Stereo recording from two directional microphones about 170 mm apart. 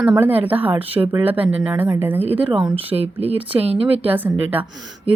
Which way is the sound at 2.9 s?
35° right (ahead or behind).